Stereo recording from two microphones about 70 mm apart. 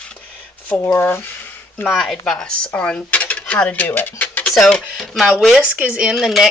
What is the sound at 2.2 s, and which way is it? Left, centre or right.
Speech, centre.